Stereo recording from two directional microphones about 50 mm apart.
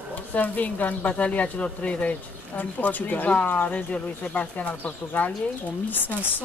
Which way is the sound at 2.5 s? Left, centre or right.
Left.